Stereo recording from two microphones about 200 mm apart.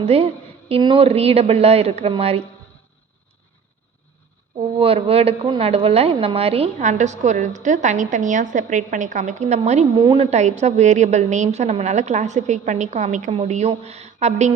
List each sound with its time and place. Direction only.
0.0 s a woman's voice: 30° right (ahead or behind)
4.8 s a woman's voice: 30° right (ahead or behind)